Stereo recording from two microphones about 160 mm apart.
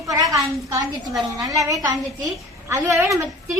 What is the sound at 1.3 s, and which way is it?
A woman's voice, 20° right (ahead or behind).